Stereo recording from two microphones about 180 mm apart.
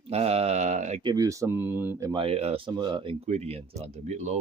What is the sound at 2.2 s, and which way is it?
Speech, 35° right (ahead or behind).